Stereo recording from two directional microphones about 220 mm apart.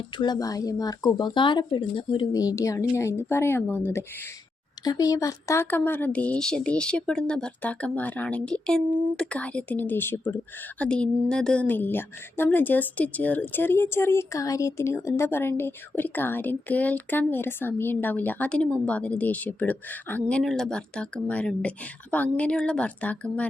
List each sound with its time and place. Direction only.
0.2 s a woman's voice: 15° left (ahead or behind)